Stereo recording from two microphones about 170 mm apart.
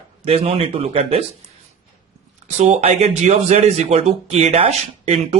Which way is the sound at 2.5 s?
40° right (ahead or behind).